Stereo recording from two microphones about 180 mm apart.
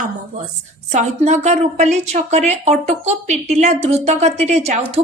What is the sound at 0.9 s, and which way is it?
A woman's voice, 40° right (ahead or behind).